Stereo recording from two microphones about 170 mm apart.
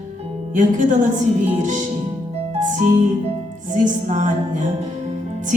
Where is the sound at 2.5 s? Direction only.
45° right (ahead or behind).